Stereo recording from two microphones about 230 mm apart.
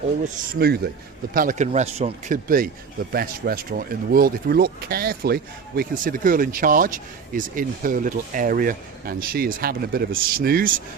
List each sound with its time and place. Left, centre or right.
0.6 s speech: right